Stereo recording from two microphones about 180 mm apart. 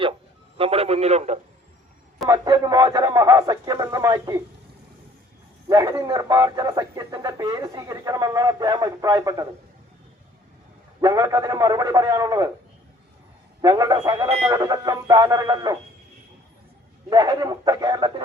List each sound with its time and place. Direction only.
0.5 s a sound: 30° right (ahead or behind)
2.3 s speech: 20° right (ahead or behind)
5.6 s speech: 20° right (ahead or behind)
11.0 s speech: 20° right (ahead or behind)
13.6 s speech: 20° right (ahead or behind)
17.1 s speech: 20° right (ahead or behind)